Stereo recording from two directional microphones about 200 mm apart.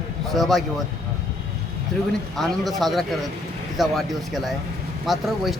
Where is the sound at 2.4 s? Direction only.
Centre (ahead or behind).